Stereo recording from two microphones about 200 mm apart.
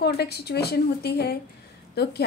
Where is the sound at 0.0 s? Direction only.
55° left (ahead or behind).